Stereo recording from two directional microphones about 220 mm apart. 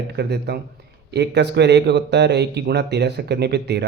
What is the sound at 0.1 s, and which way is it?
A man's voice, 50° right (ahead or behind).